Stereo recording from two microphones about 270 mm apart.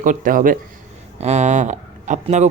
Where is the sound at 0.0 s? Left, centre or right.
Right.